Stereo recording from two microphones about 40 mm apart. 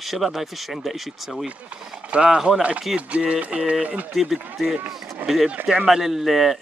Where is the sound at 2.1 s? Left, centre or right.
Right.